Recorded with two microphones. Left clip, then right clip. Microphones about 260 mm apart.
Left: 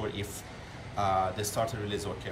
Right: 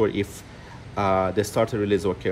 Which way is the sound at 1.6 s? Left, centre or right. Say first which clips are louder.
Right 12 dB; centre.